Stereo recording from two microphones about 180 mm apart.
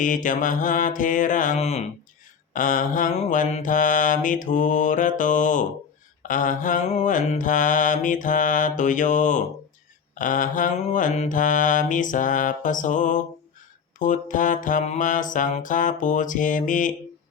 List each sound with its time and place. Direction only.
0.0 s mantra: 45° left (ahead or behind)